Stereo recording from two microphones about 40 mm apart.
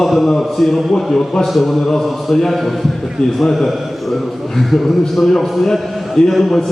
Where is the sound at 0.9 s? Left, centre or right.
Centre.